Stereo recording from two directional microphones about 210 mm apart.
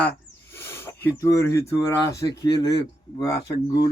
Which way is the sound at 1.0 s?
15° left (ahead or behind).